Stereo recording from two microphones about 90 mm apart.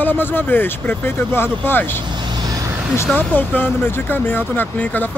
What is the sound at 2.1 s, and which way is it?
Vehicle, 60° right (ahead or behind).